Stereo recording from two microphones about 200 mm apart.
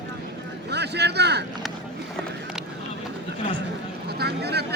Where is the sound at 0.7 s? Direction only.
55° right (ahead or behind).